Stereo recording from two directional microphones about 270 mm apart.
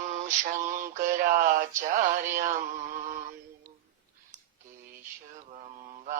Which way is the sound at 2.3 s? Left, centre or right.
Right.